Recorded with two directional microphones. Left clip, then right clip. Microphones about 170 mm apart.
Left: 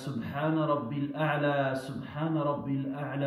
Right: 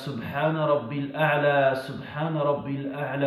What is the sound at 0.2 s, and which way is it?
A man's voice, 15° left (ahead or behind).